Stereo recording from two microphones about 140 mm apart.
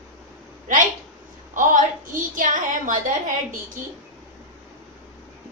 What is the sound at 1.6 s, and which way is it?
A woman's voice, 70° right (ahead or behind).